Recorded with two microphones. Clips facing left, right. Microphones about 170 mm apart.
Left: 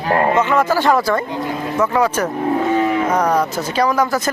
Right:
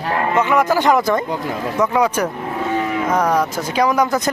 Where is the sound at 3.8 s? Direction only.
15° right (ahead or behind).